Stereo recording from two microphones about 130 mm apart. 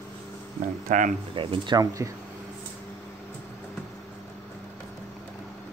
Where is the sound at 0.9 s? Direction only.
80° right.